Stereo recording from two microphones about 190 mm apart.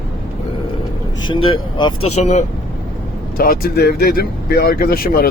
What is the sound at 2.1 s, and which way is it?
Speech, 35° left (ahead or behind).